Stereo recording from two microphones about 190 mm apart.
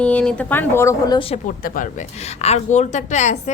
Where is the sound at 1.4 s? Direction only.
45° left (ahead or behind).